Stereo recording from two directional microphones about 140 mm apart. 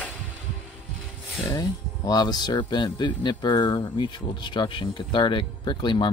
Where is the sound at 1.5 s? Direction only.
30° left (ahead or behind).